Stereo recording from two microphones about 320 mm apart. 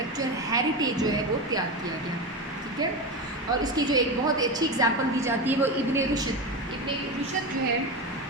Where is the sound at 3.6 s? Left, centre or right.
Centre.